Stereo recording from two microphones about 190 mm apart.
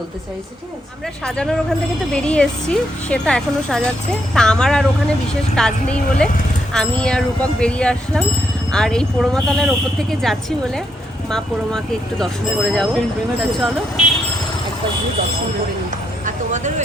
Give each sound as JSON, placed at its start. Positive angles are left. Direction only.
{"t": 1.2, "sound": "speech", "side_deg": 5}
{"t": 16.2, "sound": "vehicle", "side_deg": -40}